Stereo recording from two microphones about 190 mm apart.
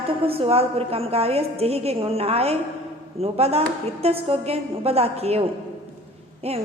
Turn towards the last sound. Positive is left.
turn(degrees=-35)  # may be behind; listen again after turning